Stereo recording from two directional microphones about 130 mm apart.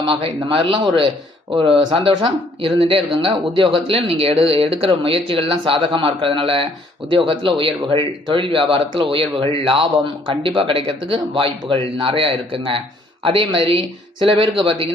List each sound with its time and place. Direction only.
0.0 s speech: 40° right (ahead or behind)
1.8 s speech: 40° right (ahead or behind)